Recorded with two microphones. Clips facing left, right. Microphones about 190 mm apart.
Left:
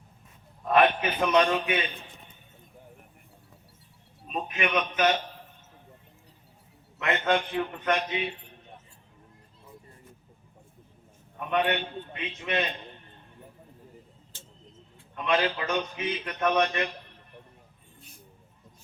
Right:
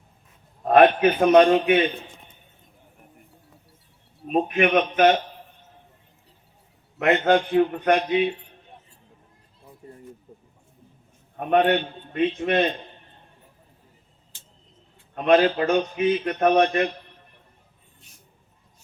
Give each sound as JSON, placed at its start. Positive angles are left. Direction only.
{"t": 0.6, "sound": "a man's voice", "side_deg": -50}
{"t": 4.3, "sound": "a man's voice", "side_deg": -50}
{"t": 7.0, "sound": "a man's voice", "side_deg": -45}
{"t": 11.3, "sound": "a man's voice", "side_deg": -50}
{"t": 15.1, "sound": "a man's voice", "side_deg": -50}